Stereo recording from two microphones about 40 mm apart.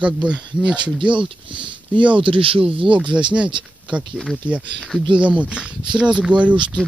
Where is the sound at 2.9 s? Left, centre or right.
Right.